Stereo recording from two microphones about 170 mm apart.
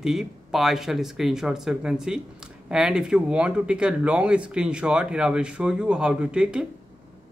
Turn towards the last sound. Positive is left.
turn(degrees=-5)  # may be behind; listen again after turning